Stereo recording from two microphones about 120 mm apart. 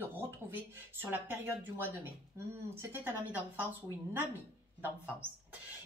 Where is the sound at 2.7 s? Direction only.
20° right (ahead or behind).